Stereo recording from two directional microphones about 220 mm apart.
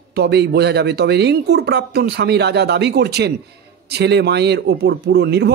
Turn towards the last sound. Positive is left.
turn(degrees=-50)  # may be behind; listen again after turning